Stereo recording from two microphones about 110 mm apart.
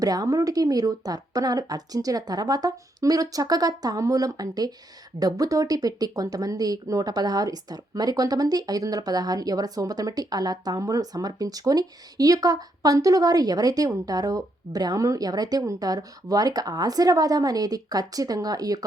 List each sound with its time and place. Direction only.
0.0 s speech: 35° right (ahead or behind)